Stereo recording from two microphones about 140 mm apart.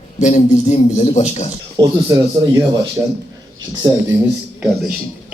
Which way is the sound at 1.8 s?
30° right (ahead or behind).